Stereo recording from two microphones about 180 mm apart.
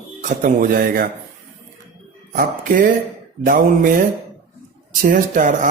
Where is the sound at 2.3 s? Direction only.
50° right (ahead or behind).